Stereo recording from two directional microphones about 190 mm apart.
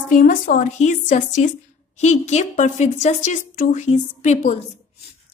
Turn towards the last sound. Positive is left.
turn(degrees=35)  # may be behind; listen again after turning